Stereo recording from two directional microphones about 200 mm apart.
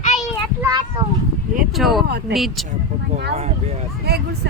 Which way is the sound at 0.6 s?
20° right (ahead or behind).